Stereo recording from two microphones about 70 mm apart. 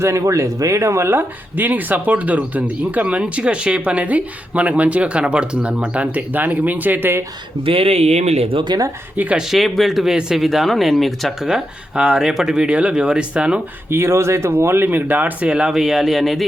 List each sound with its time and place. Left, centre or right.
0.0 s speech: right
8.6 s speech: right
9.5 s speech: centre
11.5 s speech: centre
13.9 s speech: right; by 16.4 s centre